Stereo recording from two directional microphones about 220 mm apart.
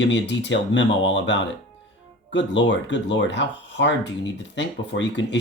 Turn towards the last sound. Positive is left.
turn(degrees=55)  # may be behind; listen again after turning